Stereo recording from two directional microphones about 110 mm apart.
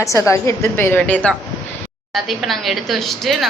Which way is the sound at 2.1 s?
Centre (ahead or behind).